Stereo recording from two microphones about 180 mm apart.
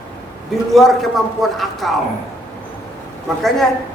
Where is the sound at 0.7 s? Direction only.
Centre (ahead or behind).